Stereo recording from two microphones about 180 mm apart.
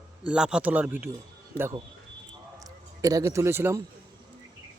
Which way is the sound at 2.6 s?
20° right (ahead or behind).